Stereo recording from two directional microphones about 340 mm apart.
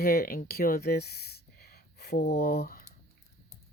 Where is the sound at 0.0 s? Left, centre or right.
Left.